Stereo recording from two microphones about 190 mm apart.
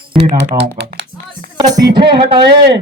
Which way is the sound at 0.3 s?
65° right (ahead or behind).